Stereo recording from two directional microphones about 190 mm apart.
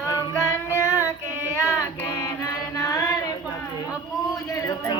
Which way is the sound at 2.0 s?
20° left (ahead or behind).